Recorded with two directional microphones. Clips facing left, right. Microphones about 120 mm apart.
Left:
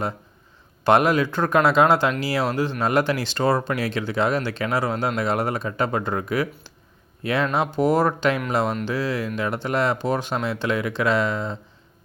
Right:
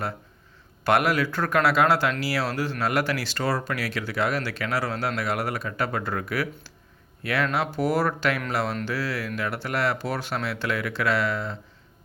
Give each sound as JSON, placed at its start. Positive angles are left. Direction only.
{"t": 0.9, "sound": "speech", "side_deg": 20}